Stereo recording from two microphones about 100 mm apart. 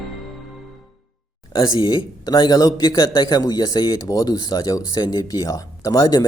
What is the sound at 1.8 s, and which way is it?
A man's voice, 50° left (ahead or behind).